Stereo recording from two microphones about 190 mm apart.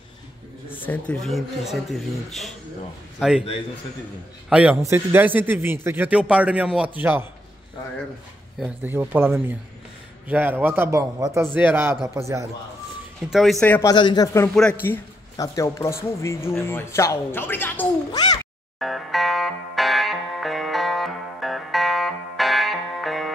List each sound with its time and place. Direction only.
0.7 s speech: 10° left (ahead or behind)
4.5 s speech: 5° right (ahead or behind)
8.5 s speech: 10° right (ahead or behind)
13.3 s speech: centre (ahead or behind)
13.8 s speech: 20° left (ahead or behind)
14.5 s speech: 5° left (ahead or behind)
18.8 s music: centre (ahead or behind)